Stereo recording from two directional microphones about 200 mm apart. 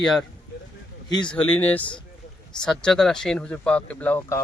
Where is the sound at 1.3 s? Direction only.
10° left (ahead or behind).